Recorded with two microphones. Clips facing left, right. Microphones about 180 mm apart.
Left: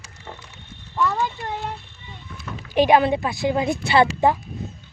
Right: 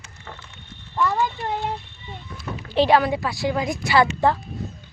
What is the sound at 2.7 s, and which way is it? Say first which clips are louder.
A woman's voice: left 1 dB; 15° left (ahead or behind).